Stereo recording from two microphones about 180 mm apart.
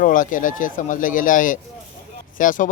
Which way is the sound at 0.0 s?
50° left (ahead or behind).